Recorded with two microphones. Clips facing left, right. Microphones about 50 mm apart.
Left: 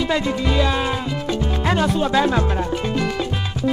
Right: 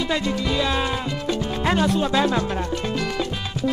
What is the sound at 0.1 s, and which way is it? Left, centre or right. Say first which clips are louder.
Music: left 3 dB; centre.